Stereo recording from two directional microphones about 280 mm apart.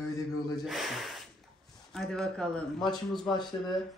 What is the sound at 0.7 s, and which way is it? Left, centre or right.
Gasp, centre.